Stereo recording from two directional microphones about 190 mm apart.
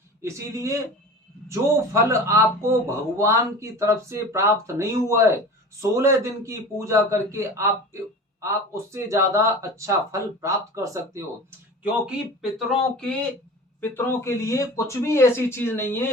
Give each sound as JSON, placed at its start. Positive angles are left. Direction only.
{"t": 0.2, "sound": "speech", "side_deg": -15}
{"t": 11.8, "sound": "speech", "side_deg": -5}
{"t": 13.8, "sound": "speech", "side_deg": 10}